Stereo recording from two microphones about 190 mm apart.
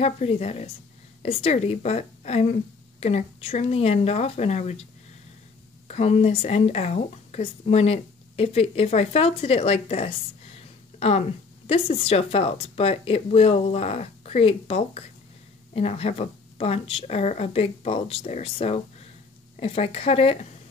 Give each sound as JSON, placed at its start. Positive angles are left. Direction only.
{"t": 0.0, "sound": "a woman's voice", "side_deg": 35}
{"t": 5.9, "sound": "a woman's voice", "side_deg": 35}